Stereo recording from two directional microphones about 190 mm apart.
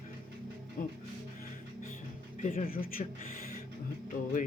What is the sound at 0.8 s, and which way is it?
Speech, 45° left (ahead or behind).